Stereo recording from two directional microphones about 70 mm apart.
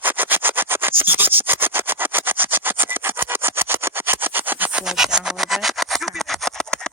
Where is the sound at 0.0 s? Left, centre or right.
Right.